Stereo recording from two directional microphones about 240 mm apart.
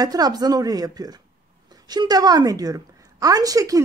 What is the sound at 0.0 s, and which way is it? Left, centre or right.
A woman's voice, centre.